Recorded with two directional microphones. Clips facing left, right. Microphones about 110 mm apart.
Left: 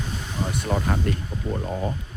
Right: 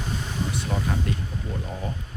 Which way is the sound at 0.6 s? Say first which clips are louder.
Left 6 dB; 50° left (ahead or behind).